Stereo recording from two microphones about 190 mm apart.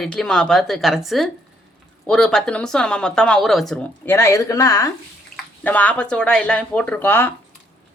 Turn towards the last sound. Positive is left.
turn(degrees=10)  # may be behind; listen again after turning